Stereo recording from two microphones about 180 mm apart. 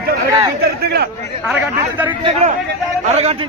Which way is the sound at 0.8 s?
60° right (ahead or behind).